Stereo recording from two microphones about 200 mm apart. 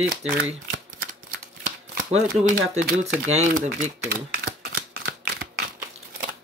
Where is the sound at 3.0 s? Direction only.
35° right (ahead or behind); by 5.7 s 50° right (ahead or behind).